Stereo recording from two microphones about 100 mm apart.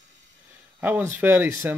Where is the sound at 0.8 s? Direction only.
20° right (ahead or behind).